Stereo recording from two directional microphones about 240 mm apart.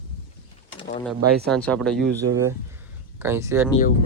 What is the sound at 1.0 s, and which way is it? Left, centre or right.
Speech, centre.